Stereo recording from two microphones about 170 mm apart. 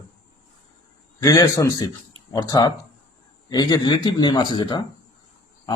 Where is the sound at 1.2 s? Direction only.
20° left (ahead or behind).